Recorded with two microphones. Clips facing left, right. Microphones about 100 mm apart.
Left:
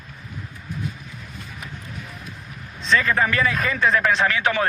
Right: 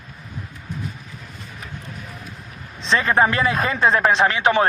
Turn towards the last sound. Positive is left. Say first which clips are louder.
# right 4 dB
turn(degrees=-25)  # may be behind; listen again after turning